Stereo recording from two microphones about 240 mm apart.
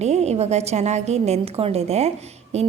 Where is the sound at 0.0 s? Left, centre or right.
Right.